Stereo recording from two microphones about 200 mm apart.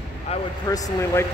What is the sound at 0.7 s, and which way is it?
Speech, 15° left (ahead or behind).